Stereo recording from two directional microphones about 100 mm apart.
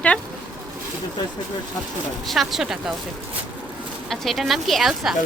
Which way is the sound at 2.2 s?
Centre (ahead or behind).